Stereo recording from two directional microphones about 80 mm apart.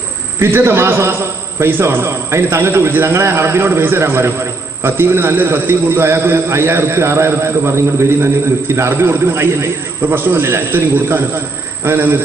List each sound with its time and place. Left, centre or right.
0.4 s a man's voice: right